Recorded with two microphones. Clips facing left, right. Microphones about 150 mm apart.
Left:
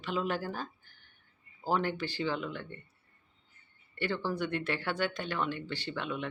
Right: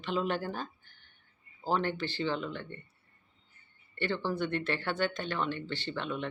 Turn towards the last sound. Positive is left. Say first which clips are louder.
# right 1 dB
turn(degrees=10)  # may be behind; listen again after turning